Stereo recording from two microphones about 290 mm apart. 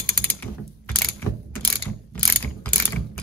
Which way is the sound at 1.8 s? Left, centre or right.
Centre.